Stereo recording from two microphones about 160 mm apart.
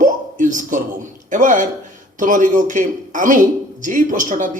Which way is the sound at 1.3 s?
55° right (ahead or behind).